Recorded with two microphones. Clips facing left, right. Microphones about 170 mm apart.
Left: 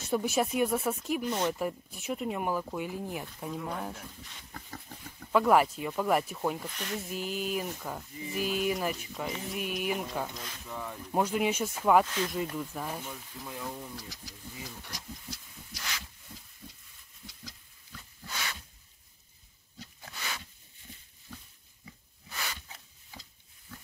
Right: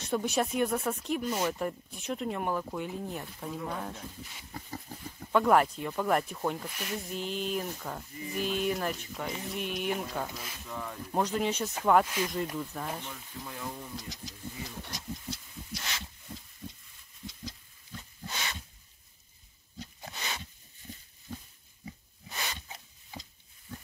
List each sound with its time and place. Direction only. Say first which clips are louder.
0.0 s speech: left 1 dB; 5° left (ahead or behind)
1.3 s speech: left 1 dB; 5° right (ahead or behind)
1.6 s speech: left 1 dB; 5° left (ahead or behind)
4.2 s speech: right 3 dB; 10° right (ahead or behind)
5.3 s speech: even; centre (ahead or behind)
6.7 s speech: even; 10° right (ahead or behind)
7.0 s speech: even; 5° left (ahead or behind)
10.6 s speech: right 1 dB; 10° left (ahead or behind)
13.9 s speech: right 3 dB; 20° right (ahead or behind)
14.9 s a sound: right 4 dB; 25° right (ahead or behind)
17.3 s pig: right 7 dB; 20° right (ahead or behind)
19.8 s pig: right 2 dB; 20° right (ahead or behind)
22.3 s a sound: right 1 dB; 20° right (ahead or behind)